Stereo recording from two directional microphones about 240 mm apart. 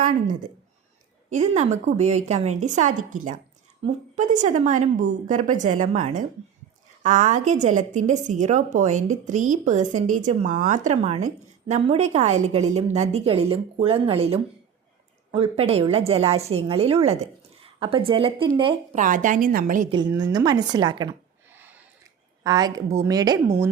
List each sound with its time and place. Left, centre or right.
1.3 s a woman's voice: right
18.9 s a woman's voice: right
19.9 s speech: centre